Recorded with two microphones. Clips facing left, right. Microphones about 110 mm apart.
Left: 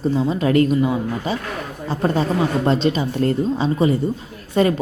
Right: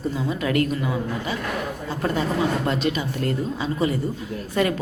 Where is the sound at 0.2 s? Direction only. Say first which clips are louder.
Left 5 dB; 30° left (ahead or behind).